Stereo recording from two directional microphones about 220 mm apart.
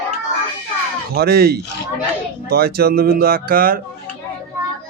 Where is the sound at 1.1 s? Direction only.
45° right (ahead or behind).